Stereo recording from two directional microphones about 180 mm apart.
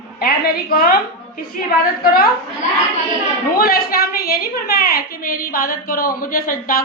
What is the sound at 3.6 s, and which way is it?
A woman's voice, 55° left (ahead or behind).